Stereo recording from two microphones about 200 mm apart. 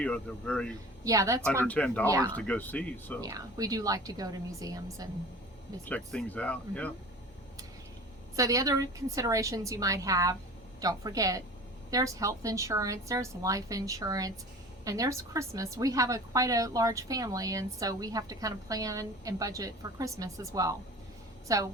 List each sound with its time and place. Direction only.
0.0 s speech: 5° left (ahead or behind)
1.0 s a woman's voice: 15° right (ahead or behind)
1.6 s speech: 5° left (ahead or behind)
2.0 s a woman's voice: 15° right (ahead or behind)
2.3 s speech: 10° left (ahead or behind)
3.2 s a woman's voice: 20° right (ahead or behind)
5.8 s speech: 5° left (ahead or behind)
8.4 s a woman's voice: 15° right (ahead or behind)